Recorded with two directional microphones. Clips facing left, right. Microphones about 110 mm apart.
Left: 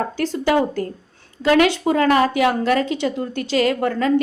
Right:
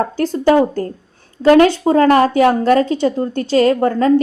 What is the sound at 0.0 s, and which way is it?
A woman's voice, 35° right (ahead or behind).